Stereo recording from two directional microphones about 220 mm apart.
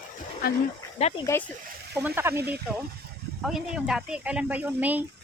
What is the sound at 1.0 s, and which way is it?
Speech, 30° left (ahead or behind).